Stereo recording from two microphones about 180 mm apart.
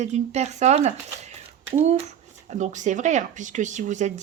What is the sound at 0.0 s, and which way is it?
Speech, 40° right (ahead or behind).